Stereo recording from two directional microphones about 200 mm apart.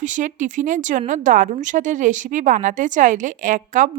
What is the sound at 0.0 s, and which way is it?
Speech, 40° right (ahead or behind).